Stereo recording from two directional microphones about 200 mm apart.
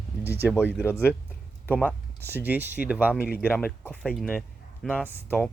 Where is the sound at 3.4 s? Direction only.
5° left (ahead or behind).